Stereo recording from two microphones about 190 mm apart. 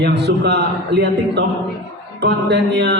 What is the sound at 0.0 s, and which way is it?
A man's voice, 60° right (ahead or behind).